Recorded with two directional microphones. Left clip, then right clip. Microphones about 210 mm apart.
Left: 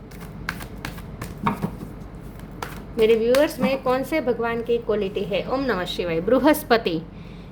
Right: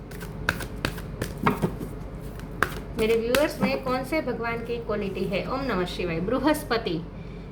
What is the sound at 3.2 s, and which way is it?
Speech, 45° left (ahead or behind).